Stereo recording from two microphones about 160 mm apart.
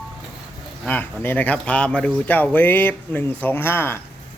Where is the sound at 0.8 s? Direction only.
10° left (ahead or behind).